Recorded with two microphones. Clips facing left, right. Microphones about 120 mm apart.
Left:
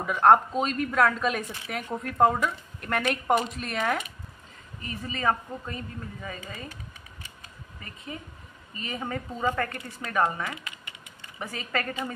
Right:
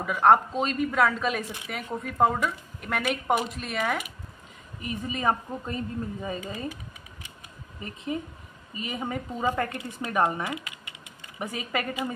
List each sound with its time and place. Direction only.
0.0 s a woman's voice: centre (ahead or behind)
4.8 s a woman's voice: 15° right (ahead or behind)
7.8 s a woman's voice: 20° right (ahead or behind)